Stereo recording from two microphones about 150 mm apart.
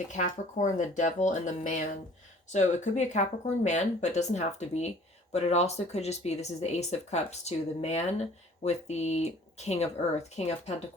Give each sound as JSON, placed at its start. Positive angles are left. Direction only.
{"t": 0.1, "sound": "speech", "side_deg": 55}